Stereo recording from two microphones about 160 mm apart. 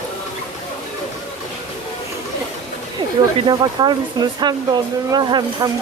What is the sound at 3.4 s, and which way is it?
Speech, 30° right (ahead or behind).